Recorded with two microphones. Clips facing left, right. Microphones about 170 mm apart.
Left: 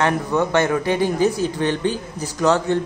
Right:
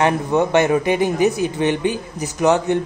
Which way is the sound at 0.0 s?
20° right (ahead or behind).